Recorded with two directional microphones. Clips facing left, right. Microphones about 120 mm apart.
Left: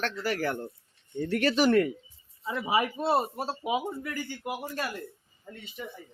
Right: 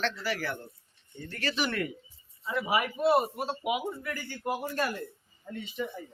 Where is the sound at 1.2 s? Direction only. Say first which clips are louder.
Left 8 dB; 55° left (ahead or behind).